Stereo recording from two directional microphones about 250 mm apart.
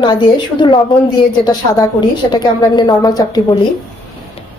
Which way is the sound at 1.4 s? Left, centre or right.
Centre.